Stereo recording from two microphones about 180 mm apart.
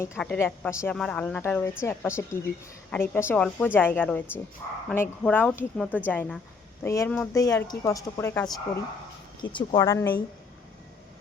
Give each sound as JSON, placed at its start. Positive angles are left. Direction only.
{"t": 0.2, "sound": "a woman's voice", "side_deg": 10}
{"t": 9.4, "sound": "a woman's voice", "side_deg": 25}
{"t": 9.8, "sound": "a woman's voice", "side_deg": 15}